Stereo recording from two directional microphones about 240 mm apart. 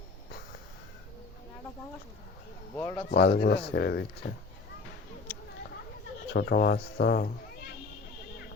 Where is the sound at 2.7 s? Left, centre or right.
Centre.